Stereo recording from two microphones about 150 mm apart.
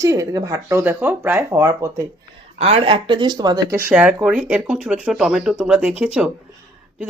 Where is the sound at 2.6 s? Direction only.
40° right (ahead or behind).